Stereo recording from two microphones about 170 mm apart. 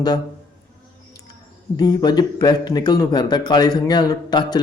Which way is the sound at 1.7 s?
25° left (ahead or behind).